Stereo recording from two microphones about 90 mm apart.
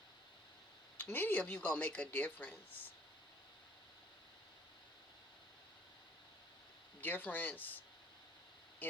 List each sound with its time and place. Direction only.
1.0 s speech: 20° left (ahead or behind)
7.0 s speech: 20° left (ahead or behind)
8.8 s speech: 20° left (ahead or behind)